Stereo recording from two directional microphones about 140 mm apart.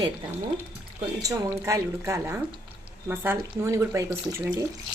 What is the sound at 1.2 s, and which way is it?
Speech, 20° right (ahead or behind).